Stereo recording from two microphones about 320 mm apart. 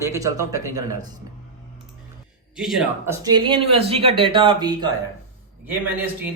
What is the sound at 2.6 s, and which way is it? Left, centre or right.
Speech, centre.